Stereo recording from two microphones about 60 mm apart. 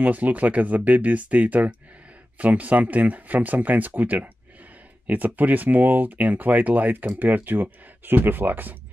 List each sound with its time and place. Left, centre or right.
0.0 s speech: right